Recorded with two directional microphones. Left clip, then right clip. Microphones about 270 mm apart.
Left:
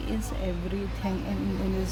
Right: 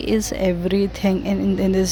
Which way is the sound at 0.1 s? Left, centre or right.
Right.